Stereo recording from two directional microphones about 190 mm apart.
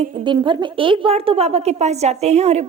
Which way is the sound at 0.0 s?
25° right (ahead or behind).